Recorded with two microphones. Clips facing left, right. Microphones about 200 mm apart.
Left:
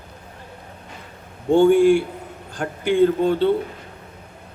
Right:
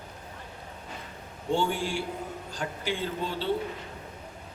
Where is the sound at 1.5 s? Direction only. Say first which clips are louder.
Left 15 dB; 55° left (ahead or behind).